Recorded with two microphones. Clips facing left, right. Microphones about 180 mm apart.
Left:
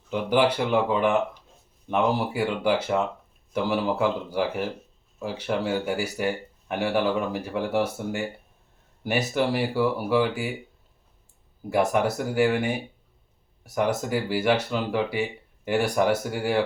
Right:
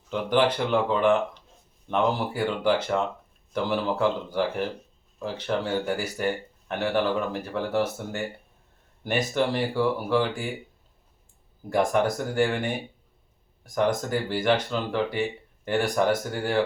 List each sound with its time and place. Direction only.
0.1 s speech: 10° left (ahead or behind)
11.7 s speech: 10° left (ahead or behind)